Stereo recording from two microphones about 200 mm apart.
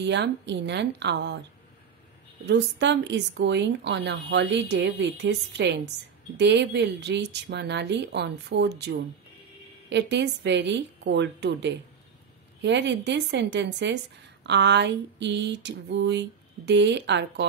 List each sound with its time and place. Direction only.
0.0 s a woman's voice: 60° right (ahead or behind)
2.4 s a woman's voice: 60° right (ahead or behind)